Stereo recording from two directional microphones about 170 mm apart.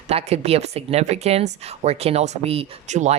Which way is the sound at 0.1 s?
40° right (ahead or behind).